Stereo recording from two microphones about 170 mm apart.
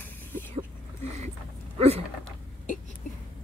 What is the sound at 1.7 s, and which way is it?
Speech, 35° right (ahead or behind).